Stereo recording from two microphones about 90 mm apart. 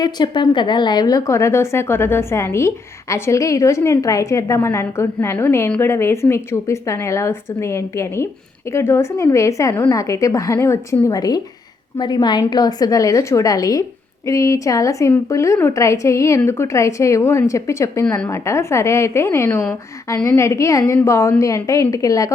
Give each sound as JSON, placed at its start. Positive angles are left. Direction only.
{"t": 0.0, "sound": "a woman's voice", "side_deg": 55}